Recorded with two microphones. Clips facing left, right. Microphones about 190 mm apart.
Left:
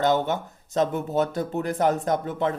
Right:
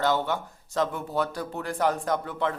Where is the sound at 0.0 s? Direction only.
20° left (ahead or behind).